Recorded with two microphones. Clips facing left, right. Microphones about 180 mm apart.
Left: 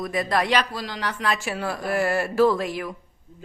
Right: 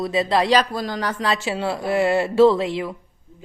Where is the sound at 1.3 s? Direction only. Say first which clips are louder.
Right 3 dB; 25° right (ahead or behind).